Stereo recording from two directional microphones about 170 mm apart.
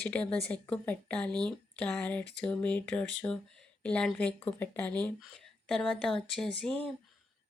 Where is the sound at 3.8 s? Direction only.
5° left (ahead or behind).